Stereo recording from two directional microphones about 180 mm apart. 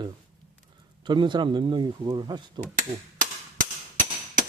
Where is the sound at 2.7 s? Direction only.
50° right (ahead or behind).